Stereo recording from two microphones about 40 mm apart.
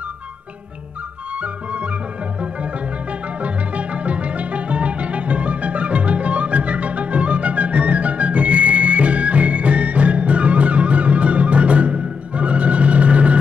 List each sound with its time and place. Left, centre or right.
1.4 s music: right
3.3 s music: right